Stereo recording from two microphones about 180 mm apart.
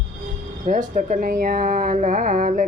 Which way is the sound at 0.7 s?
45° right (ahead or behind).